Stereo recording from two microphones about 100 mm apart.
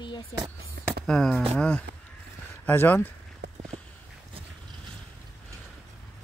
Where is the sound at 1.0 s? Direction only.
5° left (ahead or behind).